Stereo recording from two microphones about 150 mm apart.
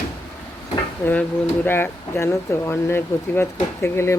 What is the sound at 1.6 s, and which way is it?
Speech, 15° left (ahead or behind).